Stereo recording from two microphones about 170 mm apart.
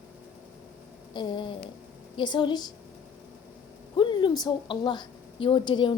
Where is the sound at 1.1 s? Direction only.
25° left (ahead or behind).